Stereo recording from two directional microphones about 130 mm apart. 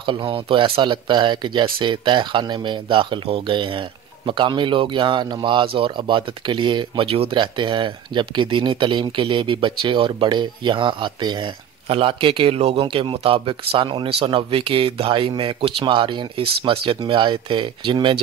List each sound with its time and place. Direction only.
0.0 s speech: 40° right (ahead or behind)